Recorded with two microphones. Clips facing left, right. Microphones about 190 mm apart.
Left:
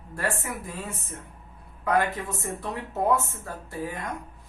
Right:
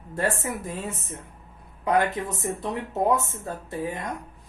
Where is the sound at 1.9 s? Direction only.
20° right (ahead or behind).